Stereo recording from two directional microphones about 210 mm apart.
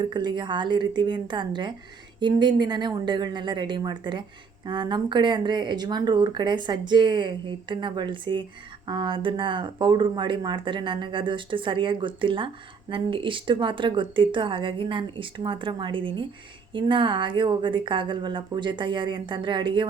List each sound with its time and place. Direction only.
0.0 s speech: 20° right (ahead or behind)